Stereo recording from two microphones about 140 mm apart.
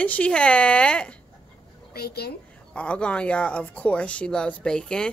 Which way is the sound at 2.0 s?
90° left.